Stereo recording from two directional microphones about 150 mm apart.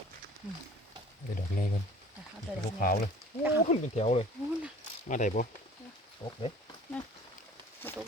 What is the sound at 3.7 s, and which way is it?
Speech, 45° left (ahead or behind).